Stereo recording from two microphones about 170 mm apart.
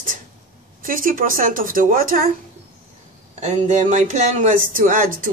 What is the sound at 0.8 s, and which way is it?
Speech, 55° right (ahead or behind).